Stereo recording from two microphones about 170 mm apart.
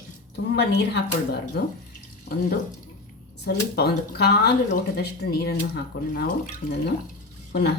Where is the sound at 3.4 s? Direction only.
70° left (ahead or behind).